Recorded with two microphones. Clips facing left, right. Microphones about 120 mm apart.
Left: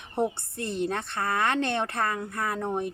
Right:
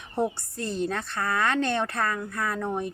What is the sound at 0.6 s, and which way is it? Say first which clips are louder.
Speech: right 1 dB; 60° left (ahead or behind).